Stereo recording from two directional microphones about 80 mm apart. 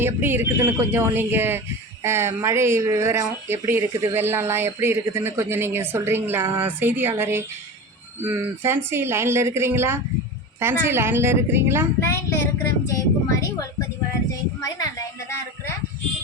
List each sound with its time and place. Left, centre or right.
0.0 s speech: right
12.9 s a woman's voice: left